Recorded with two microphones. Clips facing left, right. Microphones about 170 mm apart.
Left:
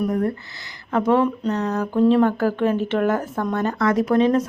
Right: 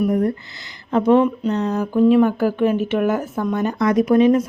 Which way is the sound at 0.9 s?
20° right (ahead or behind).